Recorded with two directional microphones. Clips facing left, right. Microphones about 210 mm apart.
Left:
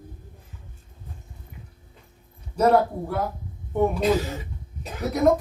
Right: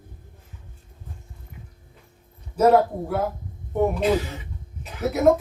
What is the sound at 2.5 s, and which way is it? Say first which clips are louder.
Speech: right 2 dB; 5° right (ahead or behind).